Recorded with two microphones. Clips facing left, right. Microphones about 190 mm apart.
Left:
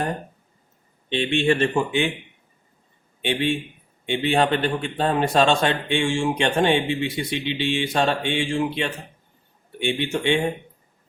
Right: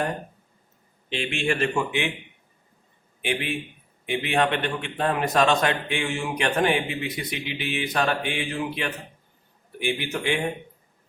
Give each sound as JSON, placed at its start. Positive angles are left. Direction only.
{"t": 1.1, "sound": "speech", "side_deg": 30}
{"t": 3.2, "sound": "a man's voice", "side_deg": 30}